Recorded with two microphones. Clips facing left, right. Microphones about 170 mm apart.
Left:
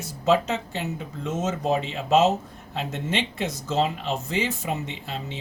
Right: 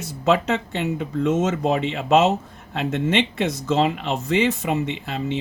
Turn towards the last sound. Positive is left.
turn(degrees=-65)  # may be behind; listen again after turning